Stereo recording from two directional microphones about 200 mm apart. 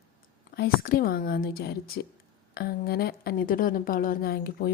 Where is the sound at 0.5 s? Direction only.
50° left (ahead or behind).